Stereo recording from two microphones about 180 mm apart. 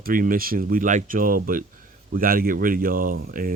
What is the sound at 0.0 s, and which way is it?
Speech, 50° right (ahead or behind).